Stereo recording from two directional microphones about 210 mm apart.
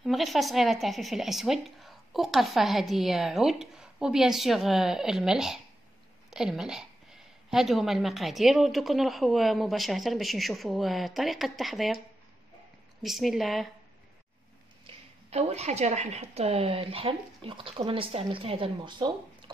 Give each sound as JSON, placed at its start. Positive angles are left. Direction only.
{"t": 0.0, "sound": "a woman's voice", "side_deg": 0}
{"t": 13.0, "sound": "a woman's voice", "side_deg": 0}
{"t": 14.9, "sound": "a woman's voice", "side_deg": -30}